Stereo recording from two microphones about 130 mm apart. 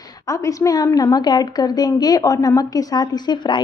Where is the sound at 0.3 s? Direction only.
25° left (ahead or behind).